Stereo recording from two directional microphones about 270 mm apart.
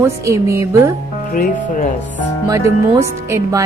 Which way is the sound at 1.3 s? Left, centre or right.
Left.